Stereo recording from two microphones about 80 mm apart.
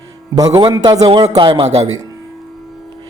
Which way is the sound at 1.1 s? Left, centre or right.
Right.